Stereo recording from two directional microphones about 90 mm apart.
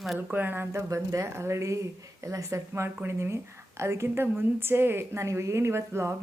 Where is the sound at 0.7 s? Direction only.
35° right (ahead or behind).